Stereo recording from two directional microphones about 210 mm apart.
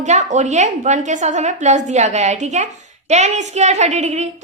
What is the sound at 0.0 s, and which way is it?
A woman's voice, 35° right (ahead or behind).